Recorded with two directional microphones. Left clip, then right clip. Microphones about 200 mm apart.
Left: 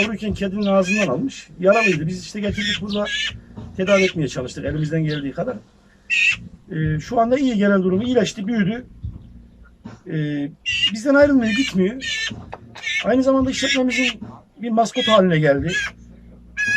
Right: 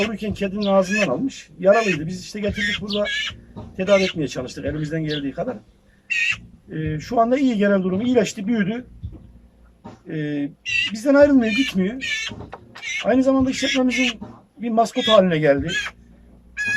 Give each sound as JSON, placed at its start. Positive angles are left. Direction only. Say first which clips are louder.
{"t": 0.0, "sound": "a man's voice", "louder": "left 1 dB", "side_deg": 0}
{"t": 6.7, "sound": "a man's voice", "louder": "left 1 dB", "side_deg": 0}
{"t": 10.1, "sound": "a man's voice", "louder": "even", "side_deg": 0}
{"t": 10.6, "sound": "speech", "louder": "left 3 dB", "side_deg": -20}
{"t": 10.9, "sound": "a man's voice", "louder": "right 1 dB", "side_deg": 0}
{"t": 11.4, "sound": "speech", "louder": "even", "side_deg": -15}
{"t": 11.8, "sound": "a man's voice", "louder": "left 2 dB", "side_deg": 0}